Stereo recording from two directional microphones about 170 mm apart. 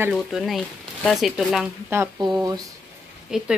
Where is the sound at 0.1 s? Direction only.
Centre (ahead or behind).